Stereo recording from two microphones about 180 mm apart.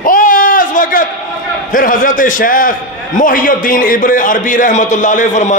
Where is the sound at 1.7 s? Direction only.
50° left (ahead or behind).